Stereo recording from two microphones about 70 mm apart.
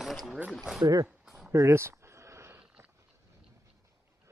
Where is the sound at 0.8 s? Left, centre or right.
Right.